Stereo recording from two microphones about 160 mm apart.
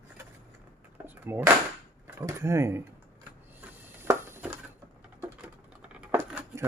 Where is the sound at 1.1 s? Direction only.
10° right (ahead or behind).